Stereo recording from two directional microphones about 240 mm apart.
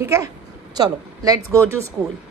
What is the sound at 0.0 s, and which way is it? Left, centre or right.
Speech, centre.